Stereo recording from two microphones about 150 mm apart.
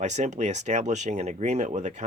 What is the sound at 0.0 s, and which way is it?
Speech, 50° right (ahead or behind).